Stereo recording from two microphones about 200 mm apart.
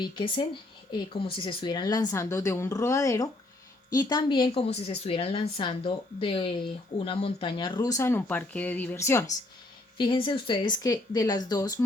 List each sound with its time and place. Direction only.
0.0 s a woman's voice: 25° left (ahead or behind)